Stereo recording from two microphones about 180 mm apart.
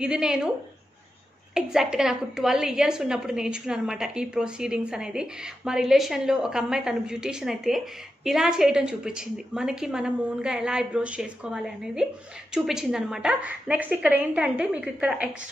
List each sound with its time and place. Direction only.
0.0 s a woman's voice: 5° right (ahead or behind)
1.5 s a woman's voice: 5° right (ahead or behind)